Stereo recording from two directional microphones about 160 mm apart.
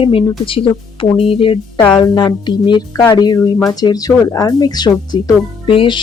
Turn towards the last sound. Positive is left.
turn(degrees=35)  # may be behind; listen again after turning